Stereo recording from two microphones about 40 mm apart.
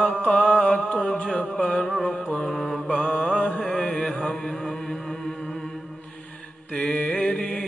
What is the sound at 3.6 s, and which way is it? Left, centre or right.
Chant, centre.